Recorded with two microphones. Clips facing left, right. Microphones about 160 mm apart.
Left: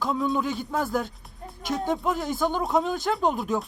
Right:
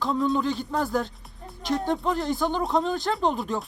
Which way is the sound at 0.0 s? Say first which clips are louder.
Right 2 dB; 5° left (ahead or behind).